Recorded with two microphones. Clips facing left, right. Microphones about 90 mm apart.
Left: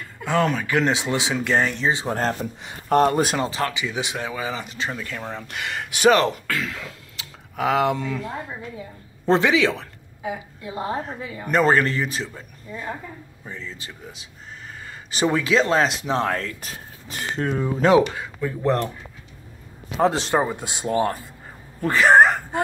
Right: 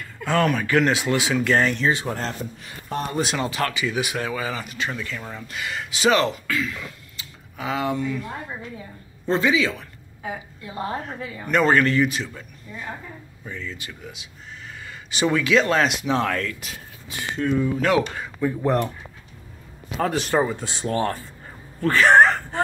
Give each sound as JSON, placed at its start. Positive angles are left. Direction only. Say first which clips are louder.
{"t": 0.2, "sound": "speech", "louder": "even", "side_deg": 20}
{"t": 2.0, "sound": "speech", "louder": "left 4 dB", "side_deg": 45}
{"t": 2.9, "sound": "speech", "louder": "left 8 dB", "side_deg": 65}
{"t": 3.3, "sound": "a man's voice", "louder": "left 1 dB", "side_deg": 30}
{"t": 3.6, "sound": "speech", "louder": "right 1 dB", "side_deg": 20}
{"t": 5.2, "sound": "speech", "louder": "left 2 dB", "side_deg": 60}
{"t": 9.3, "sound": "speech", "louder": "left 3 dB", "side_deg": 75}
{"t": 10.7, "sound": "a man's voice", "louder": "left 2 dB", "side_deg": 20}
{"t": 18.1, "sound": "speech", "louder": "right 3 dB", "side_deg": 5}
{"t": 20.0, "sound": "speech", "louder": "left 2 dB", "side_deg": 25}
{"t": 21.8, "sound": "a sound", "louder": "even", "side_deg": 10}